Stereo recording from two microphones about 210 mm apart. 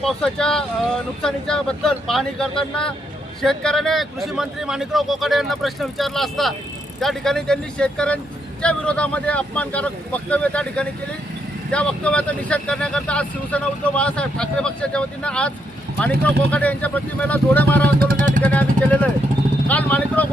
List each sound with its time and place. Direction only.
0.0 s speech: 5° left (ahead or behind)
18.0 s speech: 40° right (ahead or behind)
18.4 s speech: 5° left (ahead or behind)
19.6 s vehicle: 5° left (ahead or behind)